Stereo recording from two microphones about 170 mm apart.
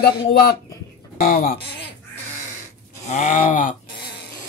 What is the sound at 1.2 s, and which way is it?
Bleat, 55° left (ahead or behind).